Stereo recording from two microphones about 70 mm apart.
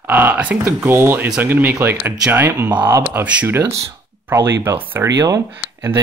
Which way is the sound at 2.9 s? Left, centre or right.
Right.